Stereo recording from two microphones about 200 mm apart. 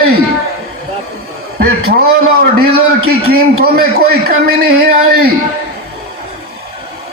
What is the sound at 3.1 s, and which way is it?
A man's voice, 50° right (ahead or behind).